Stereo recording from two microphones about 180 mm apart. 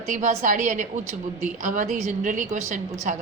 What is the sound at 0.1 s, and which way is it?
A woman's voice, 45° right (ahead or behind).